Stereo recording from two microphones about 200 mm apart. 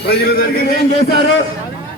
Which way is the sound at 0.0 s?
50° left (ahead or behind).